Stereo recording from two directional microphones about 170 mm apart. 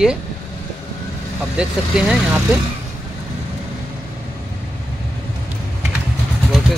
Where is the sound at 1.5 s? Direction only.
5° right (ahead or behind).